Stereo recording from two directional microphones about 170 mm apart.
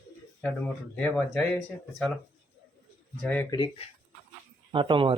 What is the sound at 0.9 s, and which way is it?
Speech, 10° left (ahead or behind).